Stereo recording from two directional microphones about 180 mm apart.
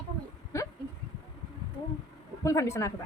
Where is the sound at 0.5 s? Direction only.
15° left (ahead or behind).